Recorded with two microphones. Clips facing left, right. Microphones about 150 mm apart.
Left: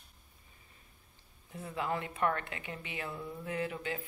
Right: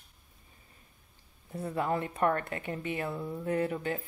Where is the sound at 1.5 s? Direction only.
40° right (ahead or behind).